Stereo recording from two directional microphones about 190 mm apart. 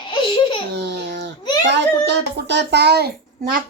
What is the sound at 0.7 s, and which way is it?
Babbling, 65° right (ahead or behind).